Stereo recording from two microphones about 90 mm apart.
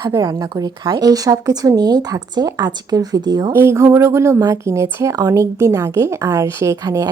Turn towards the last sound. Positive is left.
turn(degrees=-40)  # may be behind; listen again after turning